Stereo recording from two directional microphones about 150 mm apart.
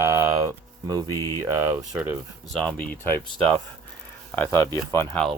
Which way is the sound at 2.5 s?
5° left (ahead or behind).